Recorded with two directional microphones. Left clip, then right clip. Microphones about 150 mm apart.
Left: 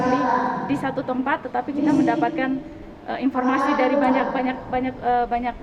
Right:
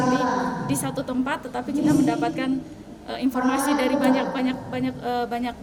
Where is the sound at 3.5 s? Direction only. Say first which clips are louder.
Left 4 dB; 50° right (ahead or behind).